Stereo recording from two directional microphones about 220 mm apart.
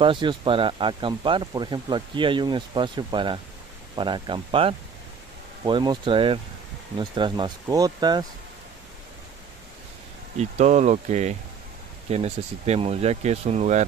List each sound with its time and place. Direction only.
0.0 s speech: 20° right (ahead or behind)
10.3 s speech: 30° right (ahead or behind)